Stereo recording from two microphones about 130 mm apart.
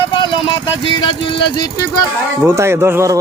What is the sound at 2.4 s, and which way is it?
Speech, 20° right (ahead or behind).